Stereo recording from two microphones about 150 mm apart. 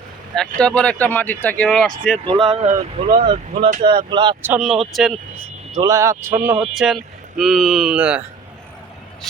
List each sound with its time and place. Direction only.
0.6 s speech: 5° left (ahead or behind)
2.2 s speech: 35° right (ahead or behind)
4.4 s speech: 5° right (ahead or behind)
5.8 s speech: 20° right (ahead or behind)
6.7 s speech: centre (ahead or behind)